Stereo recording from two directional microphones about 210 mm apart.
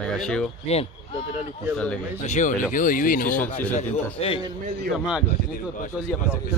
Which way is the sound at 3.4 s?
10° left (ahead or behind).